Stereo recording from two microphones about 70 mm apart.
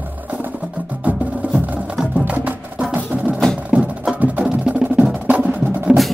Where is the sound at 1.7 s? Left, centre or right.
Centre.